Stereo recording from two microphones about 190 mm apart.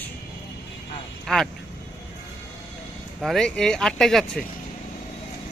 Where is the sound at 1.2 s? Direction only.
Centre (ahead or behind).